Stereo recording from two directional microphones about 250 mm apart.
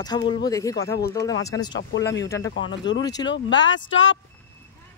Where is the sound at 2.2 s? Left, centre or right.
Centre.